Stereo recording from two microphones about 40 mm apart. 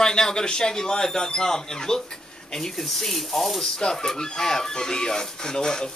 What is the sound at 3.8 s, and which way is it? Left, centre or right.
Speech, centre.